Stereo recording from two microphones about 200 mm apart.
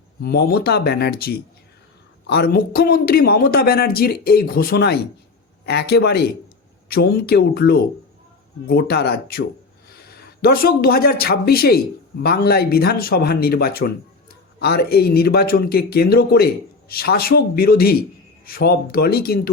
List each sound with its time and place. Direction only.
0.2 s speech: 50° left (ahead or behind)